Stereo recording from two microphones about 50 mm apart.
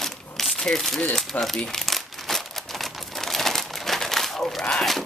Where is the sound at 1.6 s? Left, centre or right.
Centre.